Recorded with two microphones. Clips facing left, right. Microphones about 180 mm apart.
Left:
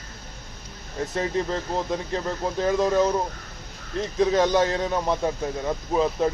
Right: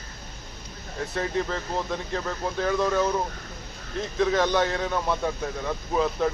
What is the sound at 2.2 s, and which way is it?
Speech, 20° left (ahead or behind).